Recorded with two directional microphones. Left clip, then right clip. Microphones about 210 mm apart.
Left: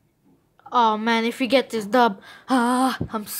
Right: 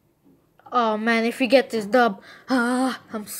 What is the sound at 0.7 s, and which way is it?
A woman's voice, 10° left (ahead or behind).